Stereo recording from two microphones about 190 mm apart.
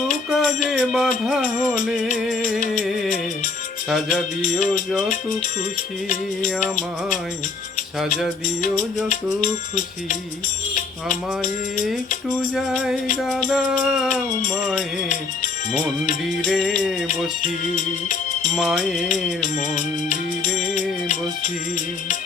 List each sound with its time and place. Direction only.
0.3 s music: centre (ahead or behind)
2.7 s music: centre (ahead or behind)
4.1 s music: 40° left (ahead or behind)
6.1 s music: 45° left (ahead or behind)
9.4 s music: 40° left (ahead or behind)
12.5 s music: centre (ahead or behind)
16.5 s music: centre (ahead or behind)
17.4 s music: 45° left (ahead or behind)
18.5 s music: centre (ahead or behind)
18.9 s music: 40° left (ahead or behind)